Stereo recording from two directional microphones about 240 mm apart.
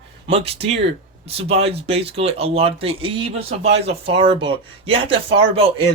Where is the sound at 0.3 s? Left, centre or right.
Right.